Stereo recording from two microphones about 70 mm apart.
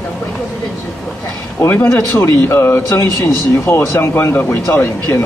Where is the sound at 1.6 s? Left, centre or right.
Left.